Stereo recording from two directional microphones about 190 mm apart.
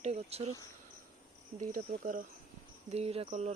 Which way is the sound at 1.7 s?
45° right (ahead or behind).